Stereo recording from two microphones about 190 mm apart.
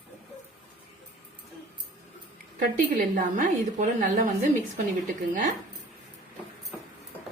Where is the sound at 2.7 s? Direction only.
45° right (ahead or behind).